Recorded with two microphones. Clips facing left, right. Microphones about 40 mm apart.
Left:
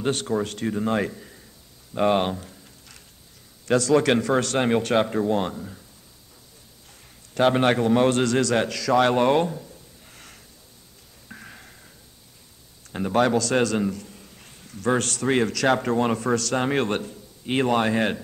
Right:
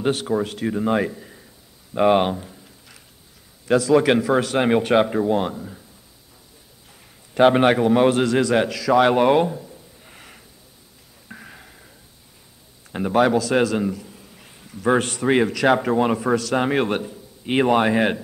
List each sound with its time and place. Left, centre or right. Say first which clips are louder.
0.0 s a man's voice: right 3 dB; centre
2.0 s a sound: right 4 dB; centre
3.6 s a man's voice: right 3 dB; centre
7.3 s a man's voice: right 4 dB; centre
10.0 s a sound: right 3 dB; centre
12.9 s a man's voice: right 3 dB; centre